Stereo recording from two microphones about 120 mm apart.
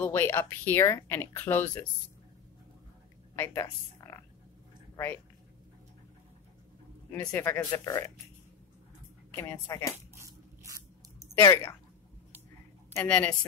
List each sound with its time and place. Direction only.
0.0 s speech: 20° left (ahead or behind)
3.3 s speech: 20° left (ahead or behind)
7.1 s speech: 25° left (ahead or behind)
9.3 s speech: 20° left (ahead or behind)
10.1 s a sound: 25° right (ahead or behind)
11.3 s speech: 25° left (ahead or behind)
12.9 s speech: 15° left (ahead or behind)